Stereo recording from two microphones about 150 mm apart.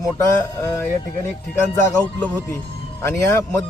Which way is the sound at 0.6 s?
15° left (ahead or behind).